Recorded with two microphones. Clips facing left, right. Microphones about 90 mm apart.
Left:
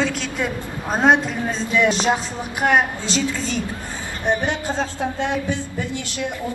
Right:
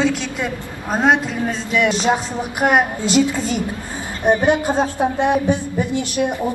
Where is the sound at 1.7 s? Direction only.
20° left (ahead or behind).